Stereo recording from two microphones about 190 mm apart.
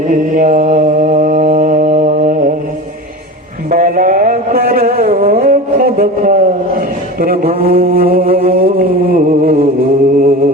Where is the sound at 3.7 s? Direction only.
45° right (ahead or behind).